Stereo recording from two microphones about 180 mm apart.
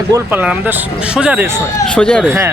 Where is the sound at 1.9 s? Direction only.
5° left (ahead or behind).